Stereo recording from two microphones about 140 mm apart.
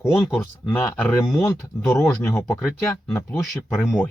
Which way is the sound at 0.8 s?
15° left (ahead or behind).